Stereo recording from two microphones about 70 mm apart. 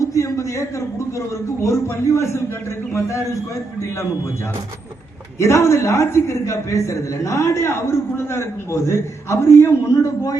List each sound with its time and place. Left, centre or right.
0.0 s a sound: left
1.6 s a man's voice: left
5.4 s a man's voice: left